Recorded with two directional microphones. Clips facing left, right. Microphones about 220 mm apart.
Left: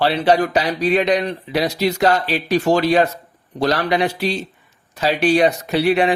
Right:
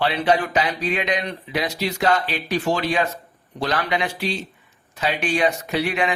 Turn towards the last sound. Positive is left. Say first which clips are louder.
# left 6 dB
turn(degrees=35)  # may be behind; listen again after turning